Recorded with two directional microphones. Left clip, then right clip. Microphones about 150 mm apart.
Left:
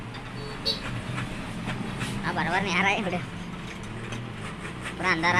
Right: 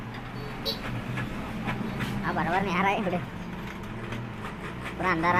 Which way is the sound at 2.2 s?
Centre (ahead or behind).